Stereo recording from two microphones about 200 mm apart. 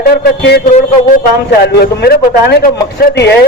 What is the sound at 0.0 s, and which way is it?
A man's voice, 50° left (ahead or behind).